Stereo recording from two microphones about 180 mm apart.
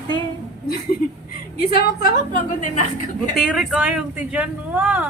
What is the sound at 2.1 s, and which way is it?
Speech, 45° left (ahead or behind).